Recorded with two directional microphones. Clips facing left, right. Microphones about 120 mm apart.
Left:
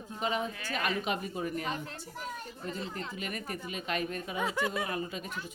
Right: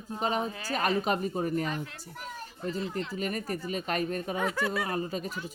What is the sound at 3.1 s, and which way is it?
Speech, 40° right (ahead or behind).